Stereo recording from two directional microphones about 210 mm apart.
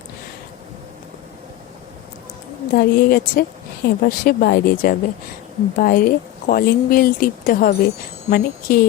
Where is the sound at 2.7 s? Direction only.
45° left (ahead or behind).